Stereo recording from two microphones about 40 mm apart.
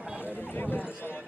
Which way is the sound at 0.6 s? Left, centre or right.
Left.